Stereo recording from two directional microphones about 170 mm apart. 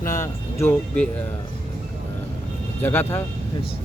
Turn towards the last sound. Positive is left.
turn(degrees=15)  # may be behind; listen again after turning